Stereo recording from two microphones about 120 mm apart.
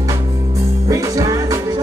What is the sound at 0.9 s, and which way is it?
Music, 30° right (ahead or behind).